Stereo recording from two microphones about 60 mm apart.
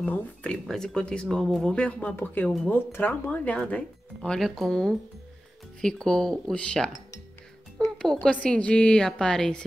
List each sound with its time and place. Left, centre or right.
0.0 s speech: left
0.7 s a woman's voice: centre
2.7 s speech: left
4.4 s a woman's voice: centre
8.0 s a woman's voice: centre